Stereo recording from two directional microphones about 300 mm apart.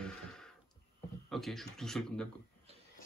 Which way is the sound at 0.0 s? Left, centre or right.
Centre.